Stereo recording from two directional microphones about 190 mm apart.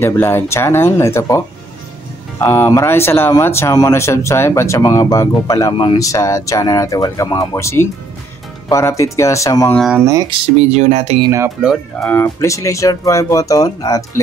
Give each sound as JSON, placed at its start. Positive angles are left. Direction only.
{"t": 0.0, "sound": "speech", "side_deg": 10}
{"t": 9.8, "sound": "speech", "side_deg": -5}
{"t": 10.7, "sound": "speech", "side_deg": -35}
{"t": 11.2, "sound": "speech", "side_deg": -15}
{"t": 11.6, "sound": "speech", "side_deg": 0}
{"t": 12.1, "sound": "speech", "side_deg": 10}